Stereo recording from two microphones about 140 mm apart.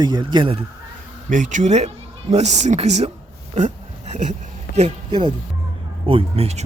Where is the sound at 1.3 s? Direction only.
65° right (ahead or behind).